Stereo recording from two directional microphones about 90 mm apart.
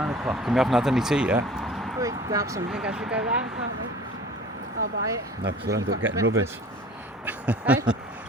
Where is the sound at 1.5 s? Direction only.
Centre (ahead or behind).